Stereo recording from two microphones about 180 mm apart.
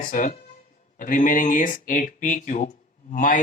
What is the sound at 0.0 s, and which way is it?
Speech, 45° left (ahead or behind).